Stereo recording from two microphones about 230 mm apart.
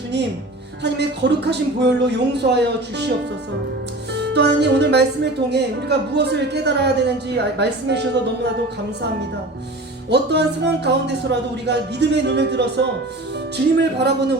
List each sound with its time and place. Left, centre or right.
0.8 s speech: right
4.1 s speech: right
10.1 s speech: right